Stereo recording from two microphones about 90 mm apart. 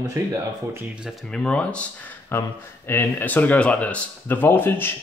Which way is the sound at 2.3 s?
25° left (ahead or behind).